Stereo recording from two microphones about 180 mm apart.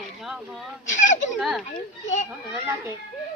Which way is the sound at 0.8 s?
45° left (ahead or behind).